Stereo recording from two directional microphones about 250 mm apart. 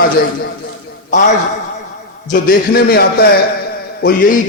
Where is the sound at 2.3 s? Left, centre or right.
Left.